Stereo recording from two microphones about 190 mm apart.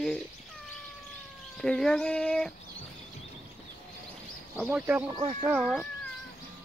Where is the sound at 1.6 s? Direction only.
5° left (ahead or behind).